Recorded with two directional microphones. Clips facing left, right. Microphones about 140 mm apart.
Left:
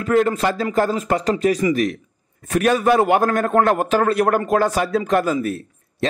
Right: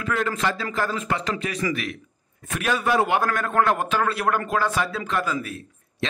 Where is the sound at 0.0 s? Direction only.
40° left (ahead or behind).